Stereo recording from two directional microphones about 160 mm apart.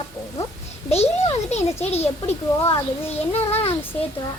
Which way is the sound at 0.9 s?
40° left (ahead or behind).